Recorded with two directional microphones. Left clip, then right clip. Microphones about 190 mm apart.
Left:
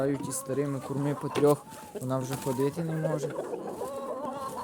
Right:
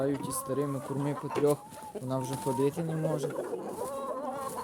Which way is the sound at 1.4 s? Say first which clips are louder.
Left 4 dB; 50° left (ahead or behind).